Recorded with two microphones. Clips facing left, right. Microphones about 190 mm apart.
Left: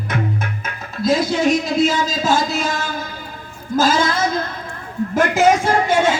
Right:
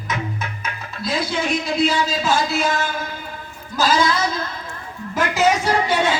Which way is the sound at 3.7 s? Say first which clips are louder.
Left 2 dB; 50° left (ahead or behind).